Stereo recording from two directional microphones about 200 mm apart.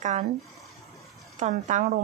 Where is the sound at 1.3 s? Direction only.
35° right (ahead or behind).